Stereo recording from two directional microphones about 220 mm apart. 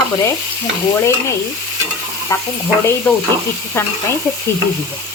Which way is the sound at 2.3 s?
15° left (ahead or behind).